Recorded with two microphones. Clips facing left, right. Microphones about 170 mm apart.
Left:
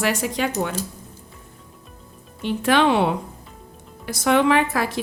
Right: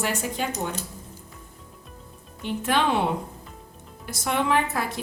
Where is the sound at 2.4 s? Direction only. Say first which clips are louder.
Left 6 dB; 80° left.